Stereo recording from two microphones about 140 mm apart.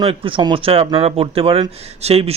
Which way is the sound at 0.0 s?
40° right (ahead or behind).